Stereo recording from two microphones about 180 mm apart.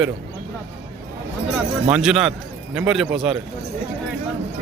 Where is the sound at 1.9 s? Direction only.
5° right (ahead or behind).